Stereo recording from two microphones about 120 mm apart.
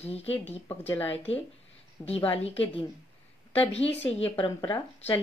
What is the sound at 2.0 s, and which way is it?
Speech, 30° left (ahead or behind).